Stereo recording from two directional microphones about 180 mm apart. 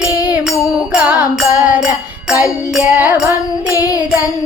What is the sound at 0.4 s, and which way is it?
Music, 5° right (ahead or behind).